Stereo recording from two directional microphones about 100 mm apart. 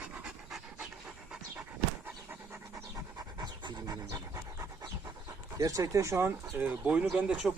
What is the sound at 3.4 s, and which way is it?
Pant, 45° right (ahead or behind).